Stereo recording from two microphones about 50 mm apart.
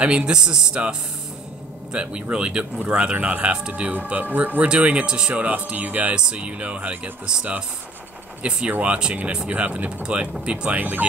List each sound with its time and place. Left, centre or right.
0.0 s speech: right
8.4 s speech: right
10.8 s speech: right